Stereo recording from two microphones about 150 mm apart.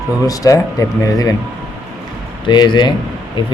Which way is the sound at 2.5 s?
30° left (ahead or behind).